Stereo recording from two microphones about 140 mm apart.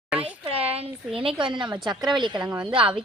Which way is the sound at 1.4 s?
35° right (ahead or behind).